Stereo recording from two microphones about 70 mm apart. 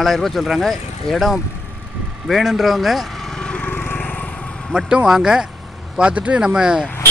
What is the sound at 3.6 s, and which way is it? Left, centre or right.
Vehicle, left.